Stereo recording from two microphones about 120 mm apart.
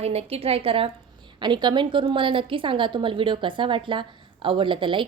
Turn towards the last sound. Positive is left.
turn(degrees=-45)  # may be behind; listen again after turning